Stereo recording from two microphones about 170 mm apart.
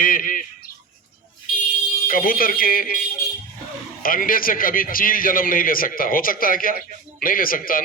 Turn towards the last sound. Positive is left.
turn(degrees=55)  # may be behind; listen again after turning